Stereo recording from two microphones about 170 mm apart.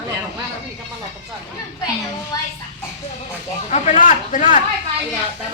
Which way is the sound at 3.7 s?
45° left (ahead or behind).